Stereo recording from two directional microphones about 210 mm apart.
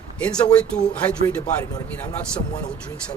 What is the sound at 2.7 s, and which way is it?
Speech, 5° left (ahead or behind).